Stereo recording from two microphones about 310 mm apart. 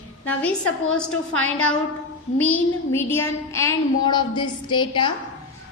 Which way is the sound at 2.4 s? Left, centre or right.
Centre.